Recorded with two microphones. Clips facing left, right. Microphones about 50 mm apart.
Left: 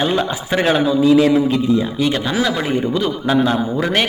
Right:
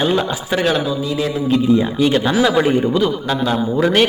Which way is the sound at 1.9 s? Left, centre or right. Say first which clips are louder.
Right 3 dB; centre.